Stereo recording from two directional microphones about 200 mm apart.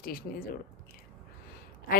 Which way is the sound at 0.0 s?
45° left (ahead or behind).